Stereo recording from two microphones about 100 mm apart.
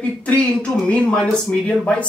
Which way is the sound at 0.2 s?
10° left (ahead or behind).